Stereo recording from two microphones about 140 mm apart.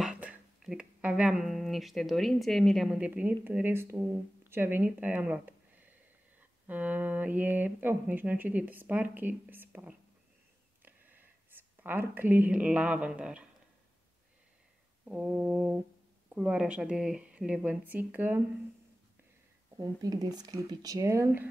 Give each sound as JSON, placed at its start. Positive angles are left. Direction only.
{"t": 0.0, "sound": "speech", "side_deg": -10}
{"t": 6.7, "sound": "speech", "side_deg": -10}
{"t": 15.0, "sound": "speech", "side_deg": -5}
{"t": 19.8, "sound": "speech", "side_deg": -25}